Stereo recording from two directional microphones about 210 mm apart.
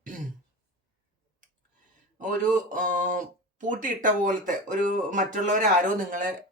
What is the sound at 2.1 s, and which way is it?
Speech, 40° right (ahead or behind).